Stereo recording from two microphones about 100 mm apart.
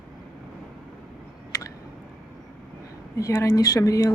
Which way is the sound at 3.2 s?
30° left (ahead or behind).